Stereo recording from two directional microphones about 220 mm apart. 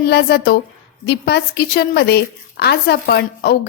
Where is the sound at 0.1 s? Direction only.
50° left (ahead or behind).